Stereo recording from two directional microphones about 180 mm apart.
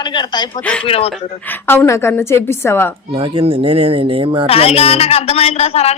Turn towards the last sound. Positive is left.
turn(degrees=35)  # may be behind; listen again after turning